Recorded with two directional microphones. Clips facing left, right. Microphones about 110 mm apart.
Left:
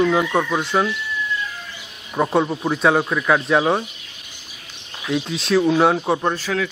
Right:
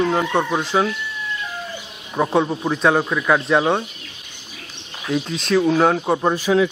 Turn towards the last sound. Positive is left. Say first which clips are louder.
# right 5 dB
turn(degrees=-20)  # may be behind; listen again after turning